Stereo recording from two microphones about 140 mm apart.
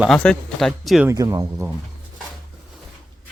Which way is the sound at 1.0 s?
25° right (ahead or behind).